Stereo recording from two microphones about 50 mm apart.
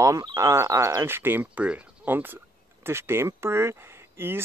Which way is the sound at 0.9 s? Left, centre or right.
Right.